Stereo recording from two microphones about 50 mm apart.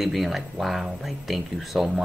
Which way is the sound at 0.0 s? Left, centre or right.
Centre.